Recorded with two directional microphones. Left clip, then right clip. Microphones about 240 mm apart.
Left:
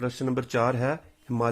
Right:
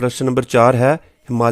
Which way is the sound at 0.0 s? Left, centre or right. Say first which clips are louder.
Right 11 dB; right.